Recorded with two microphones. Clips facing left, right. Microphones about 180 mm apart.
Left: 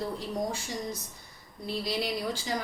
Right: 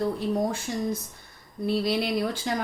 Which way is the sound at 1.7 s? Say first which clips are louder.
Right 6 dB; 60° right (ahead or behind).